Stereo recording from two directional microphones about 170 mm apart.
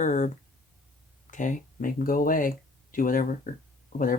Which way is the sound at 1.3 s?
50° left (ahead or behind).